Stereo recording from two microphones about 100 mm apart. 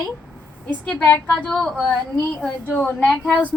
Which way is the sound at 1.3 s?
10° left (ahead or behind).